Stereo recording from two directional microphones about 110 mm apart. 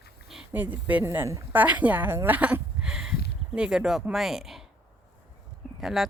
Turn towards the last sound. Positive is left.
turn(degrees=0)  # may be behind; listen again after turning